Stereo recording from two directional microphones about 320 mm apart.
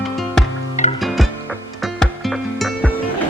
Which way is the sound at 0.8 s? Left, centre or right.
Left.